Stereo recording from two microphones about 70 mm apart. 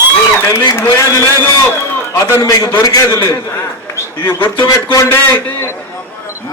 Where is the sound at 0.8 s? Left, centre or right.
Left.